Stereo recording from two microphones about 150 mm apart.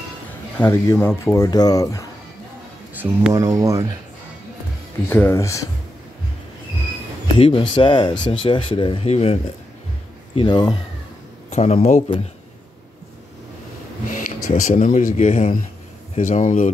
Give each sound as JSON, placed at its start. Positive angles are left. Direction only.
{"t": 0.6, "sound": "speech", "side_deg": 15}
{"t": 3.0, "sound": "speech", "side_deg": -15}
{"t": 5.1, "sound": "speech", "side_deg": 15}
{"t": 7.3, "sound": "speech", "side_deg": 35}
{"t": 10.3, "sound": "speech", "side_deg": 30}
{"t": 11.5, "sound": "speech", "side_deg": 45}
{"t": 14.1, "sound": "speech", "side_deg": 60}